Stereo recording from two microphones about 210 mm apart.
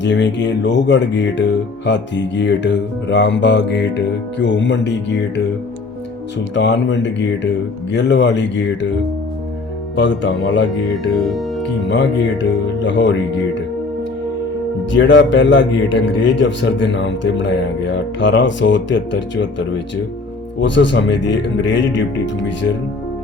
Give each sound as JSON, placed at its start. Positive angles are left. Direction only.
{"t": 0.0, "sound": "speech", "side_deg": 55}
{"t": 6.5, "sound": "speech", "side_deg": 55}
{"t": 9.9, "sound": "speech", "side_deg": 60}
{"t": 10.9, "sound": "speech", "side_deg": 0}
{"t": 11.9, "sound": "speech", "side_deg": 60}
{"t": 14.9, "sound": "speech", "side_deg": 60}